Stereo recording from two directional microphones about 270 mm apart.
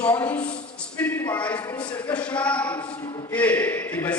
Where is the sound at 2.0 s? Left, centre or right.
Centre.